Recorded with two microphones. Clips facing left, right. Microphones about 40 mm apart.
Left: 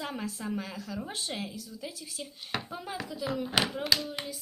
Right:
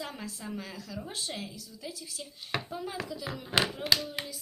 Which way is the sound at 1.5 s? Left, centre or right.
Left.